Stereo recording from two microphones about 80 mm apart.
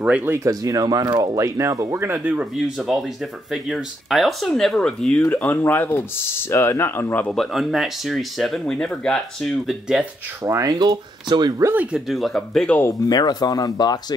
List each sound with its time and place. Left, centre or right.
0.4 s speech: right
1.3 s speech: right
2.0 s speech: right
2.5 s speech: centre
5.3 s speech: left
7.2 s speech: centre
9.7 s speech: centre
10.4 s speech: right
10.8 s speech: right
11.7 s speech: centre
12.1 s speech: centre
13.1 s speech: left